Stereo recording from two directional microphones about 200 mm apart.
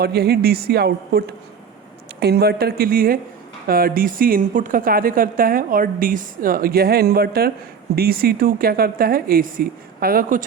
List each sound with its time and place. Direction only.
0.0 s a woman's voice: 50° right (ahead or behind)